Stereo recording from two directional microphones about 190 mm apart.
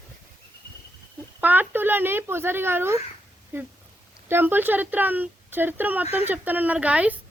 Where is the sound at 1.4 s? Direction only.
10° right (ahead or behind).